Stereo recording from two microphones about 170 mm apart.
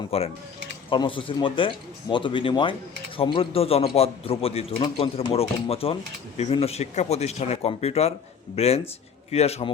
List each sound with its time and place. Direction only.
0.1 s a man's voice: 35° left (ahead or behind)